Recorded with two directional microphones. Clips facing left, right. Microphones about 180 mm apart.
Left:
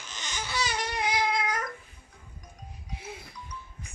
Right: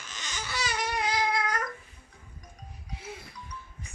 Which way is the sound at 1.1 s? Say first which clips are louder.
Left 2 dB; 20° left (ahead or behind).